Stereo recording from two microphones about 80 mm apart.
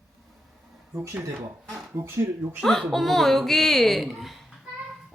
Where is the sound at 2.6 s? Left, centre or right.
Centre.